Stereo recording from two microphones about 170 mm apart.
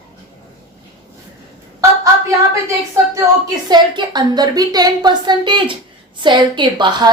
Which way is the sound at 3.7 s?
25° right (ahead or behind).